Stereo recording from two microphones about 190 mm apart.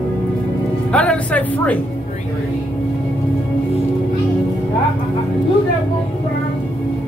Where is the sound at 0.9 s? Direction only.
5° left (ahead or behind).